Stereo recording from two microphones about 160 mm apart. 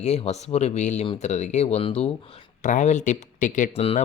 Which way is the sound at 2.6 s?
50° left (ahead or behind).